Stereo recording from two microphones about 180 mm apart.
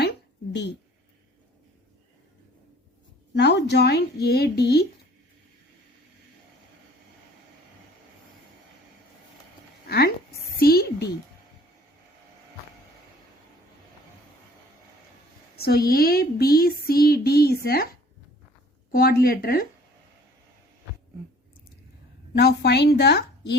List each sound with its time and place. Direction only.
3.3 s speech: 70° left (ahead or behind)
9.8 s a sound: 60° left (ahead or behind)
15.5 s a sound: 60° left (ahead or behind)
15.9 s speech: 55° left (ahead or behind)
18.9 s speech: 55° left (ahead or behind)
22.4 s speech: 65° left (ahead or behind)